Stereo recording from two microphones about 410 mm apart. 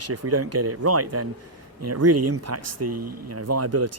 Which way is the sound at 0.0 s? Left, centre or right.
Right.